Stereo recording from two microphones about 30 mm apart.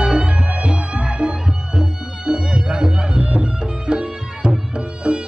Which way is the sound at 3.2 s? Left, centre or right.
Right.